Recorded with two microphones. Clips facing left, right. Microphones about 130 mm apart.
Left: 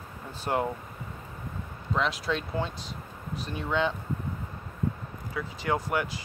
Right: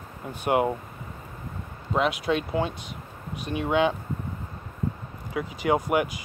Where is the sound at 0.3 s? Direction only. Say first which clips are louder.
Right 5 dB; 15° right (ahead or behind).